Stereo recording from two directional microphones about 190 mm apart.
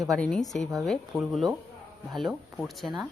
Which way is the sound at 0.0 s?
Centre (ahead or behind).